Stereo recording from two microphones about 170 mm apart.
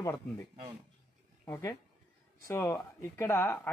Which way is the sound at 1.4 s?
15° left (ahead or behind).